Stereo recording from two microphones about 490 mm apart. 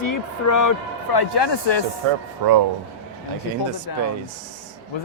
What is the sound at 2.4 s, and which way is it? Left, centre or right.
Speech, right.